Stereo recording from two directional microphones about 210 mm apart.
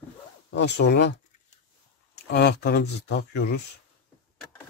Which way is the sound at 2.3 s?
50° left (ahead or behind).